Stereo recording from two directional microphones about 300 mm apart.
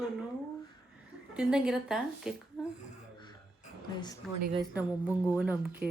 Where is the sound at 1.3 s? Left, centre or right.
Centre.